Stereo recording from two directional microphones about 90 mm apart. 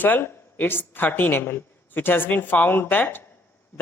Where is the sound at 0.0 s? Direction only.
20° left (ahead or behind).